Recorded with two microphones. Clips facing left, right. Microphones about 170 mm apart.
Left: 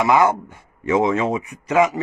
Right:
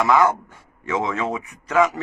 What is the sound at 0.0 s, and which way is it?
A man's voice, 15° left (ahead or behind).